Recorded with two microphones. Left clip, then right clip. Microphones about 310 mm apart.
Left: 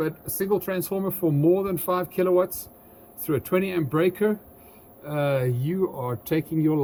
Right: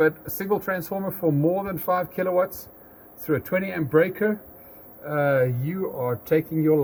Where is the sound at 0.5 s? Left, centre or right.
Centre.